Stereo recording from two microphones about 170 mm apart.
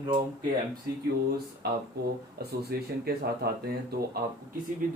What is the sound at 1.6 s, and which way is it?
Speech, 70° right (ahead or behind).